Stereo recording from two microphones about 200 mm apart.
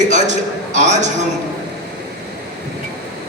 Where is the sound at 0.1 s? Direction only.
35° right (ahead or behind).